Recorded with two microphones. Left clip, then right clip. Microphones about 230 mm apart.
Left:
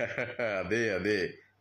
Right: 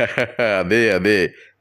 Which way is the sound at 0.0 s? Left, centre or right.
Right.